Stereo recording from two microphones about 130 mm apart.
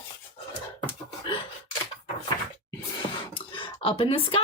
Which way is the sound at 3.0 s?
40° left (ahead or behind).